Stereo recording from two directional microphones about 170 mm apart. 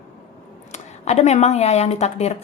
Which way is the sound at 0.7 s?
40° left (ahead or behind).